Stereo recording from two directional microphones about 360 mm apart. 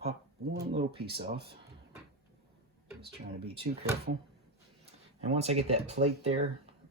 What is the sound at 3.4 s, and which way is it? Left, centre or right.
Speech, centre.